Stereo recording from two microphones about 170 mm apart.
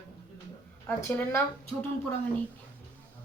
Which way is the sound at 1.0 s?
15° left (ahead or behind).